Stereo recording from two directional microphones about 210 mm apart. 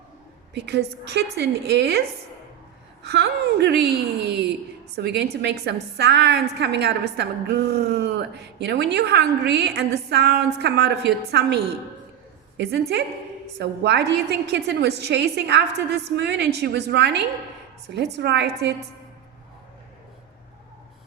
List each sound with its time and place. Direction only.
0.5 s a woman's voice: 55° right (ahead or behind)
3.1 s a woman's voice: 50° right (ahead or behind)